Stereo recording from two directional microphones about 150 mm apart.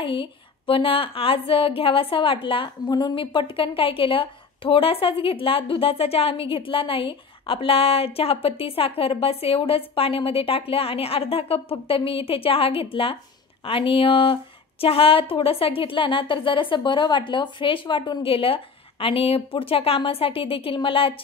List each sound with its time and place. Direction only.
0.0 s a woman's voice: 35° left (ahead or behind)